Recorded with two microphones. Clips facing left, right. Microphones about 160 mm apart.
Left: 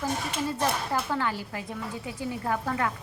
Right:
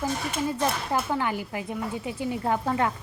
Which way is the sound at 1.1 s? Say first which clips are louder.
Right 2 dB; 15° right (ahead or behind).